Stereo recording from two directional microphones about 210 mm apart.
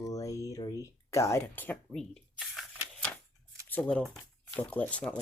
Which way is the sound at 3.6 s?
5° left (ahead or behind).